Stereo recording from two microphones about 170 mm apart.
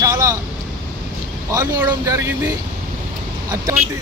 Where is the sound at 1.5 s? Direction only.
15° right (ahead or behind).